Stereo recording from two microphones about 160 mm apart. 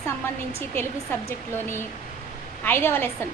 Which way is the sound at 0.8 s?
15° left (ahead or behind).